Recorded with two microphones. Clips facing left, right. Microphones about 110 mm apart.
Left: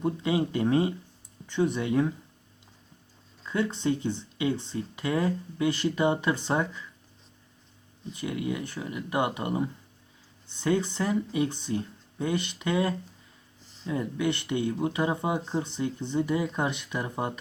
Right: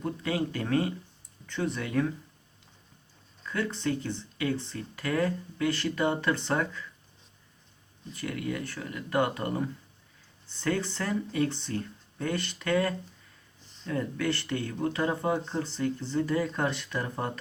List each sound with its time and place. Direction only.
0.0 s speech: 20° left (ahead or behind)
3.4 s speech: 20° left (ahead or behind)
8.1 s speech: 20° left (ahead or behind)
13.7 s a sound: centre (ahead or behind)
13.9 s speech: 20° left (ahead or behind)